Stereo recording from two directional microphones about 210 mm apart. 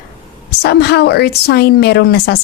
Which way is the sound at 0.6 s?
50° left (ahead or behind).